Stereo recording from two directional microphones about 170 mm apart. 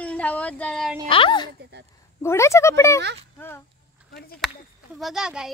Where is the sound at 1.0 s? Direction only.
30° left (ahead or behind).